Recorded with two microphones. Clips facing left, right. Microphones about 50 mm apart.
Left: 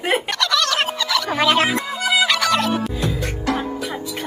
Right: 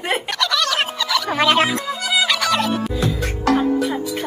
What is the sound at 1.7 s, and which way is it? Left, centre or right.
Music, left.